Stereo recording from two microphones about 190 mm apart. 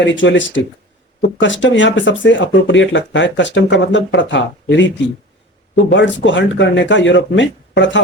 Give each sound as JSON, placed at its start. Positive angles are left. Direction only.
{"t": 0.1, "sound": "speech", "side_deg": 75}